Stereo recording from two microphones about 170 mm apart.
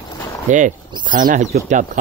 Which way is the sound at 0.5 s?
45° right (ahead or behind).